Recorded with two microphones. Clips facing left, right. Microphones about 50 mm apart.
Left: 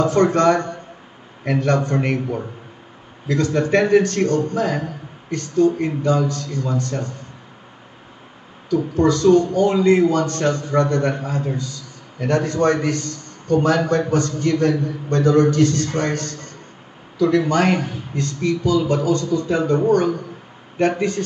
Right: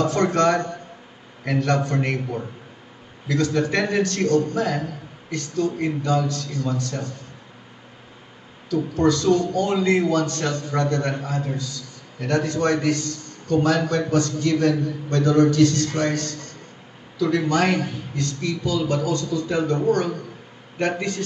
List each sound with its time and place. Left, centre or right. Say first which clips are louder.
0.0 s a man's voice: left 4 dB; left
3.3 s a man's voice: left 3 dB; left
8.6 s a man's voice: left 3 dB; left